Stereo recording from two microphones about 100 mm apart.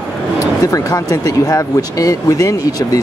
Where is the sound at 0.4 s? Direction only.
35° left (ahead or behind).